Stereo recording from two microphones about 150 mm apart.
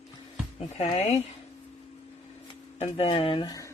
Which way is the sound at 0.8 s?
45° left (ahead or behind).